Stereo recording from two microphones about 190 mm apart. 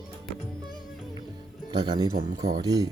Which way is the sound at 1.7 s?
20° right (ahead or behind).